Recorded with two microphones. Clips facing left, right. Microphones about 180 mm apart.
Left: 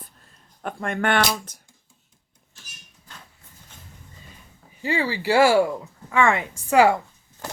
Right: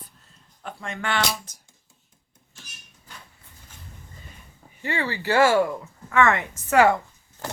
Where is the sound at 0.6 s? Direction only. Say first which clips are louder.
Left 7 dB; 55° left (ahead or behind).